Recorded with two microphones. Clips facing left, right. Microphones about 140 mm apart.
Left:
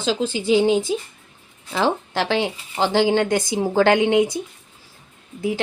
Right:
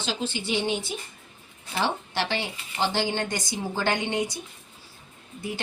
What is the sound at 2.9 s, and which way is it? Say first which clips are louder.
Speech: left 10 dB; 90° left.